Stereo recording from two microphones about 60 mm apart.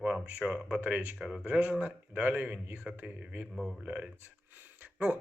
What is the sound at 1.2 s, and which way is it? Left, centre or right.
Speech, centre.